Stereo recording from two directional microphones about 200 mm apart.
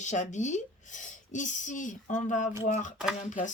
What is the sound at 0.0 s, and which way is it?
Speech, 35° left (ahead or behind).